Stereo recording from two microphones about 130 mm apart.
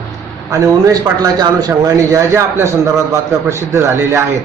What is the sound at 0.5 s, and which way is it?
A man's voice, 25° right (ahead or behind).